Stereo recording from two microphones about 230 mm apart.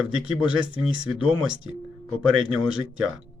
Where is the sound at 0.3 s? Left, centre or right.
Centre.